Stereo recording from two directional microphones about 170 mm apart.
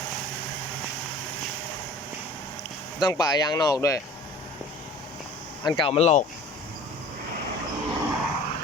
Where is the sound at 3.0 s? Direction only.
20° left (ahead or behind).